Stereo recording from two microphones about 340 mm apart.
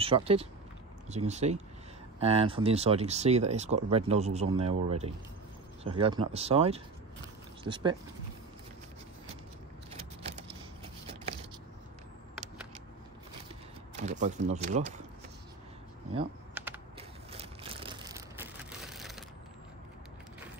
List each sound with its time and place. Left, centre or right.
0.0 s speech: centre
9.8 s vehicle: centre
14.0 s speech: right
16.5 s computer keyboard: centre
17.3 s a sound: centre